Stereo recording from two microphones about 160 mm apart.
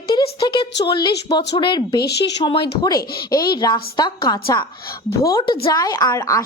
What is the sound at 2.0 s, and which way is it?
Speech, 90° left.